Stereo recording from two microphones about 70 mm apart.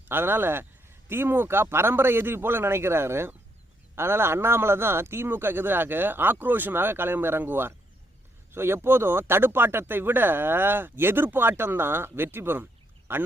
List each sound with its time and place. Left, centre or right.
0.1 s speech: right